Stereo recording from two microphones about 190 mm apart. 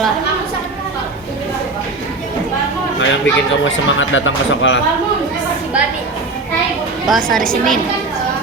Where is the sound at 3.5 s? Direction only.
85° left.